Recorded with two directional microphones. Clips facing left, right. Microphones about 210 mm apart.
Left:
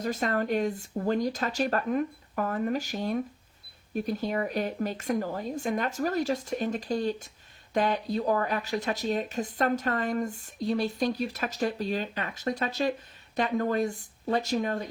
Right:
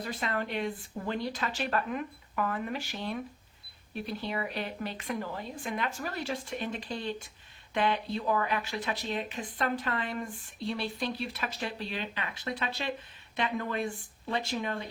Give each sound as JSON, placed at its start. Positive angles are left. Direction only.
{"t": 0.0, "sound": "speech", "side_deg": 45}